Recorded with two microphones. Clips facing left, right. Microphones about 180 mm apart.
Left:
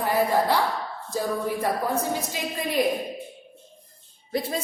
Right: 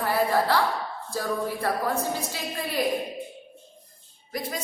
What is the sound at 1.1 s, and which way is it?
A woman's voice, 15° left (ahead or behind).